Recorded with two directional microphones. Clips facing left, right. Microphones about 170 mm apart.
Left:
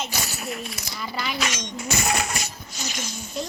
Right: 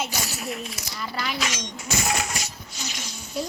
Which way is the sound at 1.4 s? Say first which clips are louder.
Left 2 dB; 65° left (ahead or behind).